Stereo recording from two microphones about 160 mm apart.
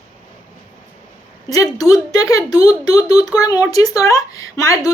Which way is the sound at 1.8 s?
20° left (ahead or behind).